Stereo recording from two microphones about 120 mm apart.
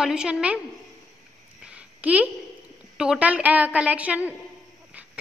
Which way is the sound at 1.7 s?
10° right (ahead or behind).